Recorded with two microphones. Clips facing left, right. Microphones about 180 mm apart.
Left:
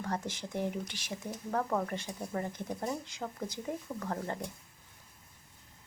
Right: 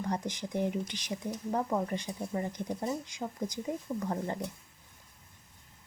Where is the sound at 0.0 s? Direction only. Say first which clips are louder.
Right 3 dB; 15° right (ahead or behind).